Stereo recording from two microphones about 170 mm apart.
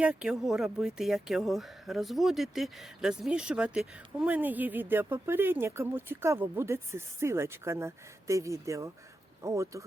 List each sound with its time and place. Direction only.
0.0 s speech: 5° right (ahead or behind)